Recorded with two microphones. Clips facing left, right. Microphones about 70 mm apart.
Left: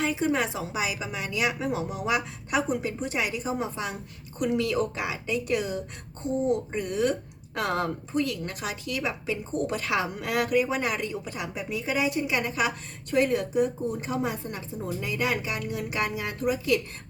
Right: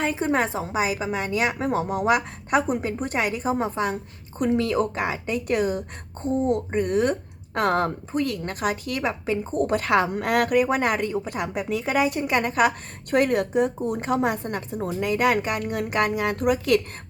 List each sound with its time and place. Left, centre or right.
0.0 s a woman's voice: right